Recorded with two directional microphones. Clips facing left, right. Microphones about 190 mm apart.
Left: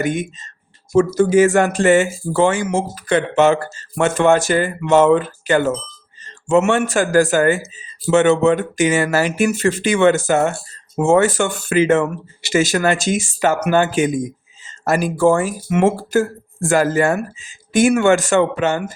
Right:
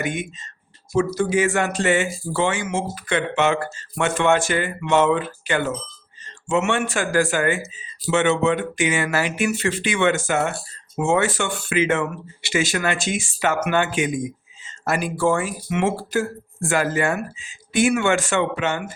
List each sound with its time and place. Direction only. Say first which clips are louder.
0.0 s speech: left 6 dB; 40° left (ahead or behind)